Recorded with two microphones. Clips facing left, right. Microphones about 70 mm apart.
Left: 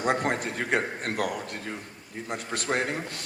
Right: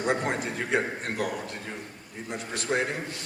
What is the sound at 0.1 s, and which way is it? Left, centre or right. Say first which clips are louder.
A man's voice: left 1 dB; left.